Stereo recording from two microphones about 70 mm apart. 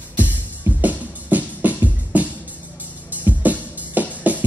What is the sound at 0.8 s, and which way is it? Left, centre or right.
Music, right.